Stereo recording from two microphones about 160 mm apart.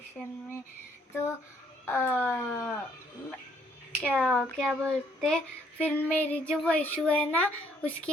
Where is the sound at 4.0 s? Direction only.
5° left (ahead or behind).